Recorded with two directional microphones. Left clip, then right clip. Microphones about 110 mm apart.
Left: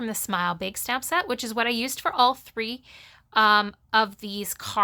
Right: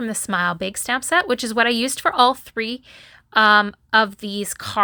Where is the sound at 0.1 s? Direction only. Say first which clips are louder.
Right 5 dB; 25° right (ahead or behind).